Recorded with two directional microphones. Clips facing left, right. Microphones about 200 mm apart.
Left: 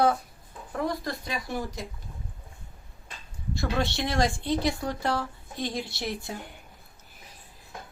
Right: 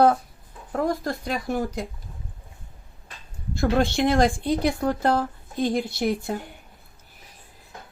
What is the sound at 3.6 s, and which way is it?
Speech, 50° right (ahead or behind).